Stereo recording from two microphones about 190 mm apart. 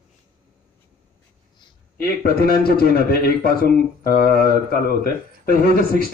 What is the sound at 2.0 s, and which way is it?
A man's voice, 55° left (ahead or behind).